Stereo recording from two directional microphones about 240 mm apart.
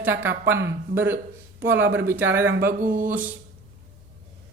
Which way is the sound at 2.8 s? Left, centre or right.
Right.